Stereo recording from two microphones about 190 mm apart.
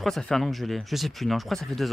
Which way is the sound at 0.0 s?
Centre (ahead or behind).